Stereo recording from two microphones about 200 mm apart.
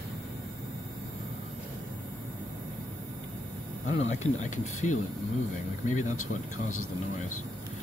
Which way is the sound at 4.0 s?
35° left (ahead or behind).